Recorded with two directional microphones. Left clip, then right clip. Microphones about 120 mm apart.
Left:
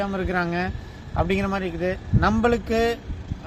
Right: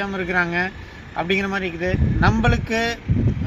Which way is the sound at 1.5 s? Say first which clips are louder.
Right 2 dB; 50° left (ahead or behind).